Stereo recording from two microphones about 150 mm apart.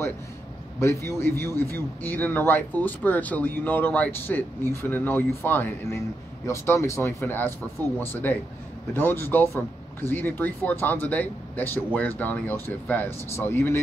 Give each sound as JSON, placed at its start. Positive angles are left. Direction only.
{"t": 0.7, "sound": "speech", "side_deg": 20}